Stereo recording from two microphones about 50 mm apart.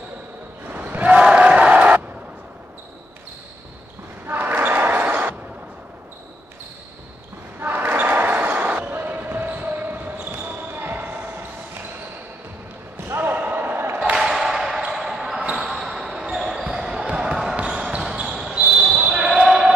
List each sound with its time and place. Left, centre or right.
0.7 s a sound: right
1.1 s crowd: centre
4.3 s basketball bounce: right
7.6 s basketball bounce: right
12.9 s slam: right
14.1 s a sound: centre
14.9 s basketball bounce: centre
17.6 s basketball bounce: centre